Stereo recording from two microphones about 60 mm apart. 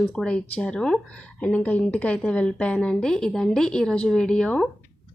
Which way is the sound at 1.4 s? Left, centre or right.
Left.